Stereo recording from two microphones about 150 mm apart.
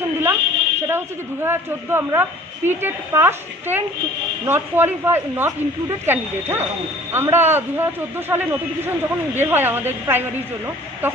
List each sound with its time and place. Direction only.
0.2 s a man's voice: 15° right (ahead or behind)